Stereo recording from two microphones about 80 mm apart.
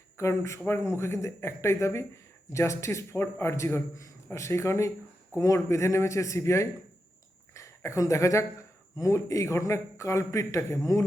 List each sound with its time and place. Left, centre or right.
0.2 s a man's voice: left